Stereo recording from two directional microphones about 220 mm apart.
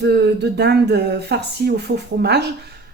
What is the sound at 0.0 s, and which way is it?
A woman's voice, 50° right (ahead or behind).